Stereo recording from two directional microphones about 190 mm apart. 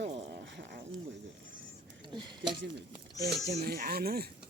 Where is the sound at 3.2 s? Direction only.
55° right (ahead or behind).